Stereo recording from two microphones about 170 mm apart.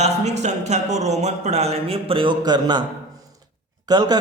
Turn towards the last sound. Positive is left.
turn(degrees=-25)  # may be behind; listen again after turning